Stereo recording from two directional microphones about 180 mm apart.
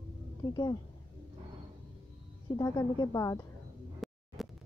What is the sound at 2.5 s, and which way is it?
Speech, 20° left (ahead or behind).